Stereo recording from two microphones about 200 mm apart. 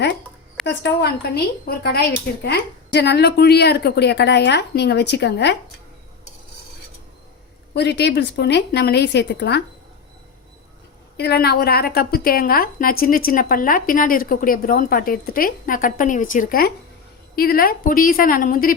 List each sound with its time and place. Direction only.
0.6 s a woman's voice: 60° left (ahead or behind)
7.7 s a woman's voice: 55° left (ahead or behind)
11.2 s a woman's voice: 55° left (ahead or behind)